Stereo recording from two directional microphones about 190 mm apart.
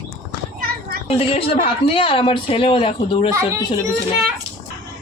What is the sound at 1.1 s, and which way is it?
Speech, 30° left (ahead or behind).